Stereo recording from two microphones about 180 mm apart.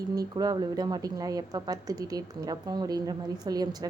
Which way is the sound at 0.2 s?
20° right (ahead or behind).